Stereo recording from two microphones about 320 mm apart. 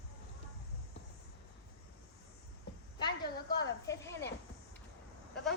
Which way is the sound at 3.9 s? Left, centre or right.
Centre.